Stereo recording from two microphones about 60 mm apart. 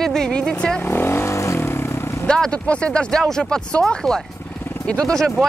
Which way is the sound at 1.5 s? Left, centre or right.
Left.